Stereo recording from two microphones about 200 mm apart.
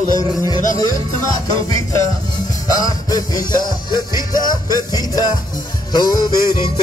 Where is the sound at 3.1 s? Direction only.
20° left (ahead or behind).